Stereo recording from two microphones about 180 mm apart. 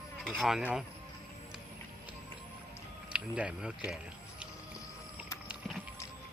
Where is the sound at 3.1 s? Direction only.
5° right (ahead or behind).